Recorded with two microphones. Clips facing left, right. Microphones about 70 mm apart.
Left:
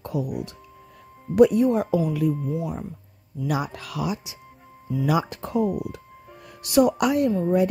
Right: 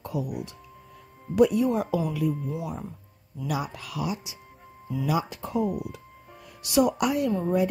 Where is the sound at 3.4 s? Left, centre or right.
Left.